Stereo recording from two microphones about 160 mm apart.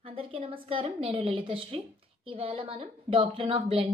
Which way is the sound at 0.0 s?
35° right (ahead or behind).